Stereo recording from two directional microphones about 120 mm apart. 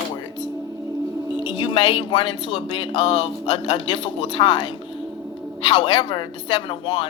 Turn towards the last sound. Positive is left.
turn(degrees=40)  # may be behind; listen again after turning